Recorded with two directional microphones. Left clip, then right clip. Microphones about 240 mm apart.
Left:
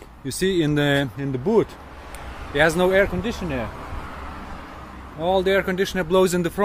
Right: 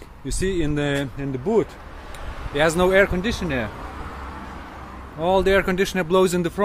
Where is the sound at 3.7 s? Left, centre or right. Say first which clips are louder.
Even; left.